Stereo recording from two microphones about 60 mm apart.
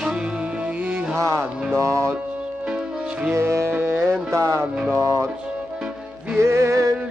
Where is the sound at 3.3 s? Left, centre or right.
Right.